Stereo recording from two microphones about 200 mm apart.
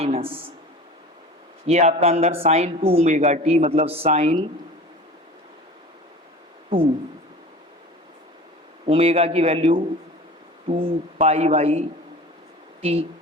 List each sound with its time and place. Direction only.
0.0 s speech: 30° right (ahead or behind)
1.6 s speech: 35° right (ahead or behind)
8.9 s speech: 30° right (ahead or behind)